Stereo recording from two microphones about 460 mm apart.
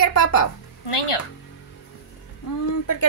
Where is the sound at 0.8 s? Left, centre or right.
Left.